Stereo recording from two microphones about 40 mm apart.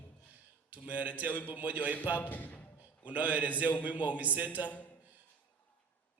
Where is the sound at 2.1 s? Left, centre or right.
Left.